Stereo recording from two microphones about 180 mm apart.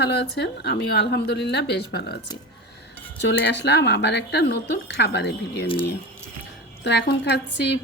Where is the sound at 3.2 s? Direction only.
75° left (ahead or behind).